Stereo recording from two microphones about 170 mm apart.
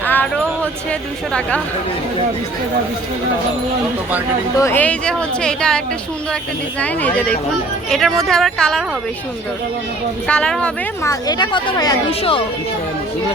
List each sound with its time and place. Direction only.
0.0 s a sound: 10° left (ahead or behind)
4.6 s speech: 10° left (ahead or behind)
10.2 s speech: 5° left (ahead or behind)
11.0 s speech: 20° left (ahead or behind)